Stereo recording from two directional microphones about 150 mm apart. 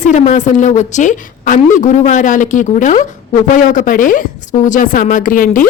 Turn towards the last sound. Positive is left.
turn(degrees=65)  # may be behind; listen again after turning